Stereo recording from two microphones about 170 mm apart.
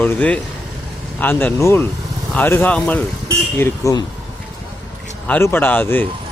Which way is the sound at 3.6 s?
20° left (ahead or behind).